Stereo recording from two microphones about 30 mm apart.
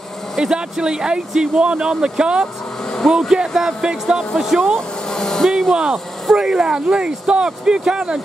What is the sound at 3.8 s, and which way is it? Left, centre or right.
Speech, right.